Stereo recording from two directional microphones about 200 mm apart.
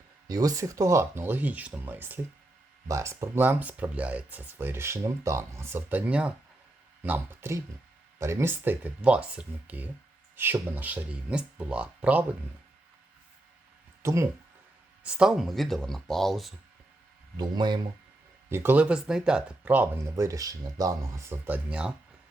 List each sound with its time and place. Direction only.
0.3 s speech: 20° right (ahead or behind)
14.0 s speech: 15° right (ahead or behind)
15.0 s speech: centre (ahead or behind)
17.3 s speech: 20° right (ahead or behind)
18.4 s speech: 10° right (ahead or behind)